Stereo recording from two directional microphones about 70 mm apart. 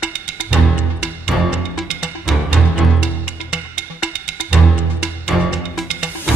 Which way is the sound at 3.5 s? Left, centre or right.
Centre.